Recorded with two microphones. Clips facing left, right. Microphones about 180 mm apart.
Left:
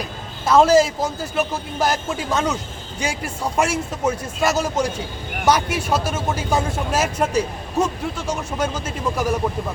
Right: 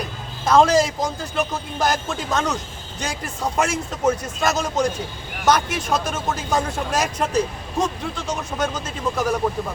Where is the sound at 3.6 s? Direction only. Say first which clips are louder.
Left 1 dB; 10° left (ahead or behind).